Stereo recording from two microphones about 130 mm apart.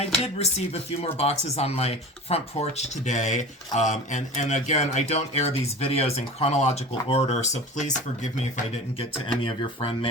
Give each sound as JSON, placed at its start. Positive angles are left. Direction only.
{"t": 0.3, "sound": "speech", "side_deg": 55}
{"t": 7.8, "sound": "speech", "side_deg": 70}
{"t": 9.0, "sound": "speech", "side_deg": 40}